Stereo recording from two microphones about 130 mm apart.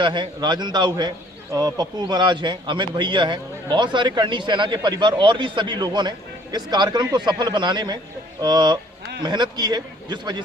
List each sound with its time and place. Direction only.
0.0 s a man's voice: 35° right (ahead or behind)